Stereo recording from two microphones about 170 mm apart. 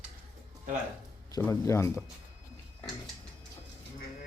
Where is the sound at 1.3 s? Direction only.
15° left (ahead or behind).